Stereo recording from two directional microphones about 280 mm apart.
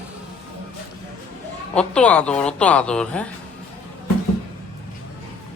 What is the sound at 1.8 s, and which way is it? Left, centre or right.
A woman's voice, centre.